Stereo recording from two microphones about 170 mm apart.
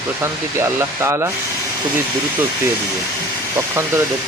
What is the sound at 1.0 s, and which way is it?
Speech, 15° right (ahead or behind).